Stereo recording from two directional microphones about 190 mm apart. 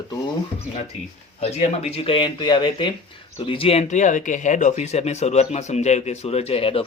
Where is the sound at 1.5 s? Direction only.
35° left (ahead or behind).